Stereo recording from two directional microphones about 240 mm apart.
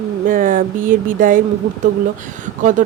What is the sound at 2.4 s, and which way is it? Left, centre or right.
Speech, right.